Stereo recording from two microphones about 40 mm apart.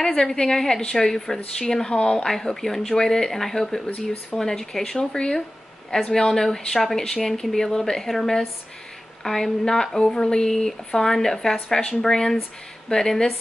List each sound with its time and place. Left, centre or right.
0.2 s speech: centre
2.0 s speech: left
2.2 s speech: centre